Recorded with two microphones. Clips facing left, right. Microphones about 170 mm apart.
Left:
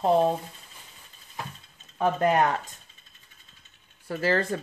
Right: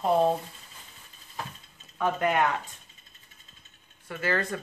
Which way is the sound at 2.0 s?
35° left (ahead or behind).